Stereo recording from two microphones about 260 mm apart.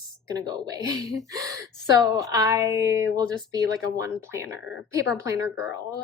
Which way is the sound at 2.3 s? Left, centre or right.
Centre.